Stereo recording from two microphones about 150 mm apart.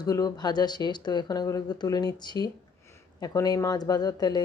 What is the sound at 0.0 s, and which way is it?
Speech, 25° left (ahead or behind).